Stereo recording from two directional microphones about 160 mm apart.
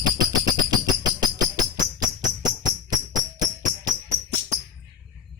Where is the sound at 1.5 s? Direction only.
25° right (ahead or behind).